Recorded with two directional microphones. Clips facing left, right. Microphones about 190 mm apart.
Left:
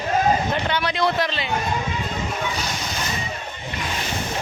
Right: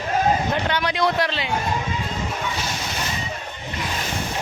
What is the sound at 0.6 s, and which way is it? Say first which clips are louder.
Speech: even; 10° right (ahead or behind).